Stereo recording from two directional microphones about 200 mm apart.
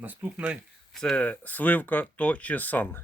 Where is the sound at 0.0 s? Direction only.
10° right (ahead or behind); by 3.0 s 10° left (ahead or behind).